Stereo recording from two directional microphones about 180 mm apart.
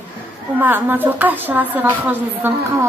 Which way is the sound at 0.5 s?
10° right (ahead or behind).